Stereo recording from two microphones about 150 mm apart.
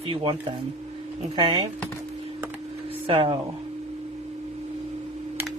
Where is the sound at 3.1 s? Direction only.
35° right (ahead or behind).